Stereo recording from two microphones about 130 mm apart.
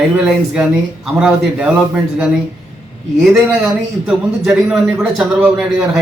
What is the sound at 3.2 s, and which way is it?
A man's voice, 5° right (ahead or behind).